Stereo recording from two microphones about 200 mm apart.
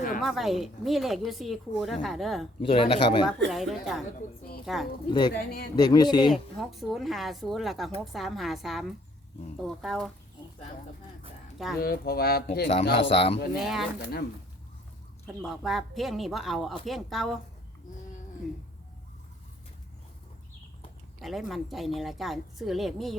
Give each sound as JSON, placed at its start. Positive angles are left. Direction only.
{"t": 0.2, "sound": "a woman's voice", "side_deg": 0}
{"t": 2.6, "sound": "speech", "side_deg": 30}
{"t": 3.2, "sound": "a woman's voice", "side_deg": 0}
{"t": 5.0, "sound": "speech", "side_deg": 20}
{"t": 6.3, "sound": "a woman's voice", "side_deg": 0}
{"t": 11.5, "sound": "speech", "side_deg": 0}
{"t": 11.8, "sound": "speech", "side_deg": 50}
{"t": 13.1, "sound": "speech", "side_deg": 30}
{"t": 13.6, "sound": "a woman's voice", "side_deg": 0}
{"t": 14.0, "sound": "speech", "side_deg": 50}
{"t": 15.4, "sound": "a woman's voice", "side_deg": 0}
{"t": 21.2, "sound": "a woman's voice", "side_deg": 0}